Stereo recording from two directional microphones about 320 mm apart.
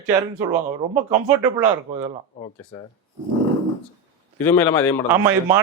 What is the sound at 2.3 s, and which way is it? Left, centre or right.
Speech, centre.